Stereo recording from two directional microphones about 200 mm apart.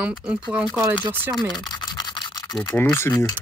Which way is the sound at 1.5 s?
20° left (ahead or behind).